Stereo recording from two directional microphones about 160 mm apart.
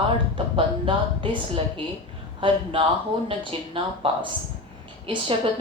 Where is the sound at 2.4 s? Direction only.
35° right (ahead or behind).